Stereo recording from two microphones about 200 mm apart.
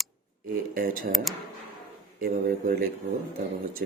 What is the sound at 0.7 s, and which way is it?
Speech, 45° right (ahead or behind).